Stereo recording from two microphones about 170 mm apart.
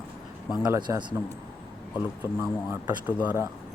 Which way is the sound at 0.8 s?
25° right (ahead or behind).